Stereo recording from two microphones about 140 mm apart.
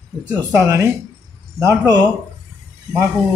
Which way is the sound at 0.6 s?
20° right (ahead or behind).